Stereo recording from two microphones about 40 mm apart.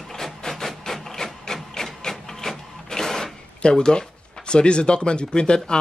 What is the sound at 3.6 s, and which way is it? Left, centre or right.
Speech, left.